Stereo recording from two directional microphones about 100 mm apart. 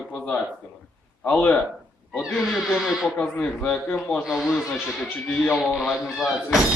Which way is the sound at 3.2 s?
15° left (ahead or behind).